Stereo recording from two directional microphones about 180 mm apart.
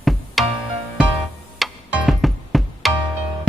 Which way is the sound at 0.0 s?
Centre (ahead or behind).